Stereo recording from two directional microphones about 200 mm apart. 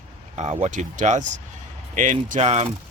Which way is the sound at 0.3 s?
35° right (ahead or behind).